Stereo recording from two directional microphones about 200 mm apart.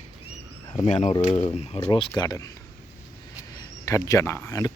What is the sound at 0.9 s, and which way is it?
Speech, 35° left (ahead or behind).